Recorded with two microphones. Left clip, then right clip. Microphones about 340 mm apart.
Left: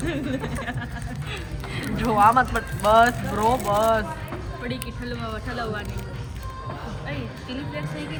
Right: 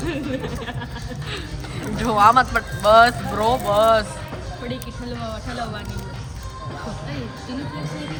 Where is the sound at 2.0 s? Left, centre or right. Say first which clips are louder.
Right 3 dB; centre.